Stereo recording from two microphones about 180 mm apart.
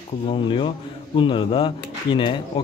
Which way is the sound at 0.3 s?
30° left (ahead or behind).